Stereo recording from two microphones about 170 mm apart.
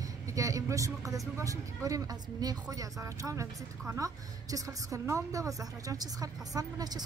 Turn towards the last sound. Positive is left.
turn(degrees=-20)  # may be behind; listen again after turning